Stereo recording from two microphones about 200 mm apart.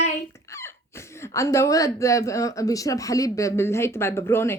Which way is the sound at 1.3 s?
15° left (ahead or behind).